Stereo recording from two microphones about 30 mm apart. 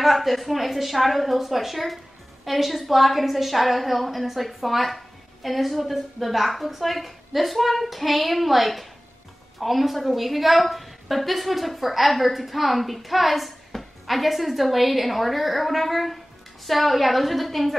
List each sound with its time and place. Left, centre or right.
0.0 s a woman's voice: centre